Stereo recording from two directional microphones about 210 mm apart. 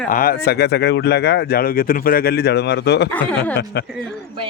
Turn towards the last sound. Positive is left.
turn(degrees=5)  # may be behind; listen again after turning